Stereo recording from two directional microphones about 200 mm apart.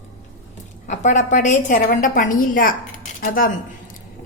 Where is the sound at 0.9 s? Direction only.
40° left (ahead or behind).